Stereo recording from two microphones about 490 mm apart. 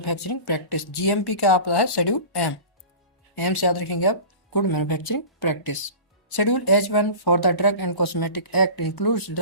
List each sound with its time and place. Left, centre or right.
0.0 s speech: left